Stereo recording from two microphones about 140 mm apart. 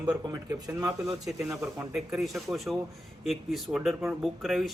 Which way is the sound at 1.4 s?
5° right (ahead or behind).